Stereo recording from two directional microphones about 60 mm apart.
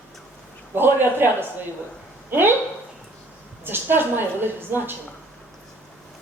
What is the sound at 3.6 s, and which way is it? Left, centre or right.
A woman's voice, right.